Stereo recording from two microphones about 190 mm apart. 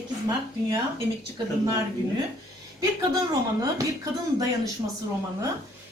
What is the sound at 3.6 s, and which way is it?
Speech, 20° right (ahead or behind).